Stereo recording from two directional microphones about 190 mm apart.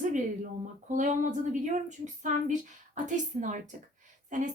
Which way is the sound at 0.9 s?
40° right (ahead or behind).